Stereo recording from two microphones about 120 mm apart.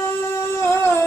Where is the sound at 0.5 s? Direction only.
20° left (ahead or behind).